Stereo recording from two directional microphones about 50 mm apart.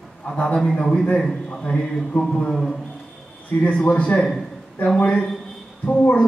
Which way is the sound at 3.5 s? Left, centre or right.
Left.